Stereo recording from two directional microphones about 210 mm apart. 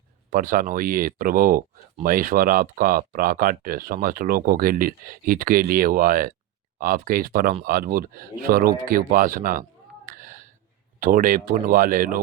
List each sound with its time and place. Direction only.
0.3 s speech: 40° right (ahead or behind)
10.1 s a sound: 40° right (ahead or behind)
11.0 s speech: 40° right (ahead or behind)